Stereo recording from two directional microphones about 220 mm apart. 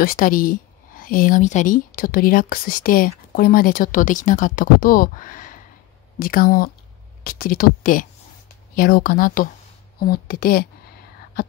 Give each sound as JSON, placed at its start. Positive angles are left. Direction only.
{"t": 0.0, "sound": "speech", "side_deg": 40}